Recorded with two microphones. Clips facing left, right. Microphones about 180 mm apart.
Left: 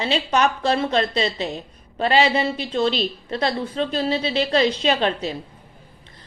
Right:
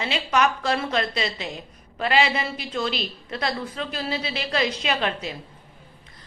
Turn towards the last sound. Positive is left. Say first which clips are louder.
# left 5 dB
turn(degrees=30)  # may be behind; listen again after turning